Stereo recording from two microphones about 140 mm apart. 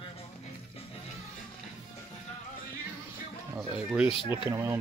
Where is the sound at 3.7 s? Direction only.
10° right (ahead or behind).